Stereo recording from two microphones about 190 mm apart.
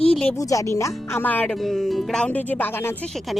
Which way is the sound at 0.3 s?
15° left (ahead or behind).